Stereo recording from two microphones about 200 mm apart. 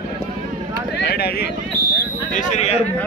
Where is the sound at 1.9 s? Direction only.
40° left (ahead or behind).